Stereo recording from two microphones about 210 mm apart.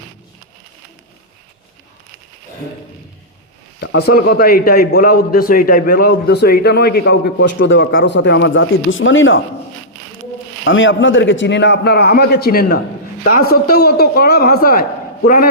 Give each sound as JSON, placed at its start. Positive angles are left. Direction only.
{"t": 3.8, "sound": "a man's voice", "side_deg": 50}
{"t": 10.6, "sound": "a man's voice", "side_deg": 65}